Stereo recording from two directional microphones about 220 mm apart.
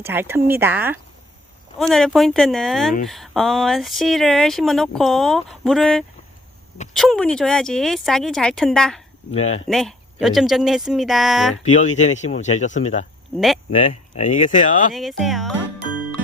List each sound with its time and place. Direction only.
0.0 s speech: 10° right (ahead or behind)
9.3 s speech: 30° left (ahead or behind)
9.6 s speech: centre (ahead or behind)
11.6 s speech: 30° left (ahead or behind)
13.3 s speech: centre (ahead or behind)
13.7 s speech: 25° left (ahead or behind)
14.9 s speech: centre (ahead or behind)